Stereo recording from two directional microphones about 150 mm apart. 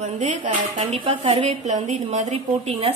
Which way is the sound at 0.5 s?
45° right (ahead or behind).